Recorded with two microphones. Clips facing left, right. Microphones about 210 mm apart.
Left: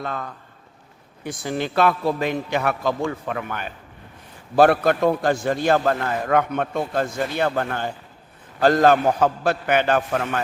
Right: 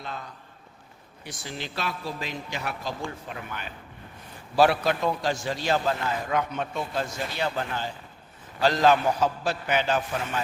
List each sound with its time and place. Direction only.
0.0 s a man's voice: 55° left (ahead or behind)